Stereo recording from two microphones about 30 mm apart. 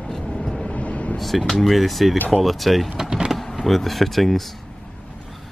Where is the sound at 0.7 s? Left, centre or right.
Left.